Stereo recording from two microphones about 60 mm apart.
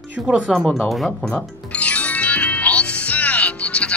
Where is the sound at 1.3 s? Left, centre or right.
Left.